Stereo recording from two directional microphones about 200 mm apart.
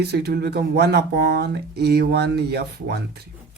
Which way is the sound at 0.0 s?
55° right (ahead or behind).